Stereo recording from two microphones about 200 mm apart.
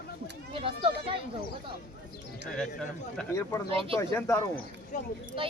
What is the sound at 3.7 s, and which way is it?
Speech, 25° right (ahead or behind).